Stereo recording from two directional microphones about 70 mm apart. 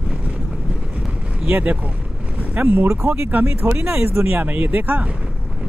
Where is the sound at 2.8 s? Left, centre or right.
Right.